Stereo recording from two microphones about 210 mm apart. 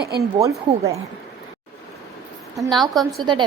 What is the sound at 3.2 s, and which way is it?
Speech, 20° right (ahead or behind).